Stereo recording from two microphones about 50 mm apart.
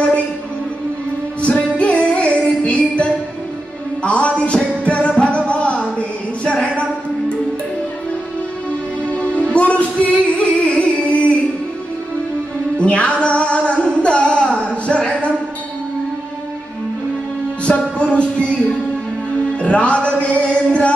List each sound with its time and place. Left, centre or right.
1.4 s music: left
9.1 s music: left
12.7 s music: left
17.6 s music: left
19.6 s music: left